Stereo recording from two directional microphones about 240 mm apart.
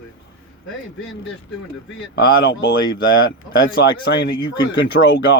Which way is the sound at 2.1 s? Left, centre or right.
Left.